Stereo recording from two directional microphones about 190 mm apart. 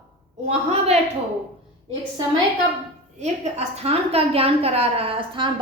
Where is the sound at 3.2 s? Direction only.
35° right (ahead or behind).